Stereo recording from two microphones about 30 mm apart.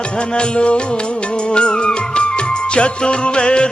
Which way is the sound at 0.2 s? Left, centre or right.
Left.